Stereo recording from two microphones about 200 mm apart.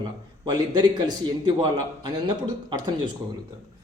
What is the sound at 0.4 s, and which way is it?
A man's voice, 20° right (ahead or behind).